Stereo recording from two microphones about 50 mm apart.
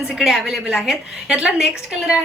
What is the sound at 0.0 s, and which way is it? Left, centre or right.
A woman's voice, centre.